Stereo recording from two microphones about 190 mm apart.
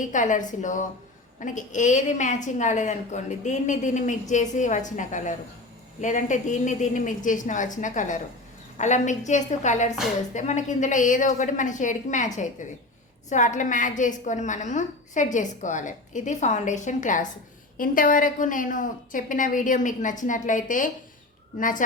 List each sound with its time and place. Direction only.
0.0 s a woman's voice: 40° left (ahead or behind)